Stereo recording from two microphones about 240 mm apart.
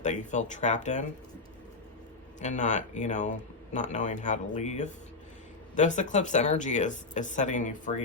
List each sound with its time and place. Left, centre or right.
0.0 s speech: left
2.4 s speech: left